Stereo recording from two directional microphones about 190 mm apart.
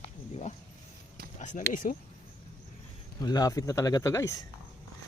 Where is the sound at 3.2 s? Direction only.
20° left (ahead or behind).